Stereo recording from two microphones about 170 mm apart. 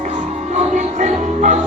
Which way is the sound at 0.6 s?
45° right (ahead or behind).